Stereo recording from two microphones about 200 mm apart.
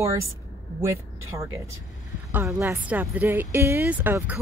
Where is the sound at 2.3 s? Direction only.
10° right (ahead or behind).